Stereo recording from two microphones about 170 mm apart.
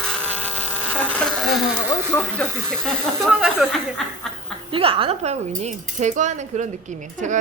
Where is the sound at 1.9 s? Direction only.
15° left (ahead or behind).